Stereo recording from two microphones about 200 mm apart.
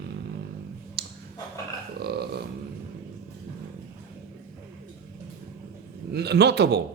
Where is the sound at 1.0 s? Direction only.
50° right (ahead or behind).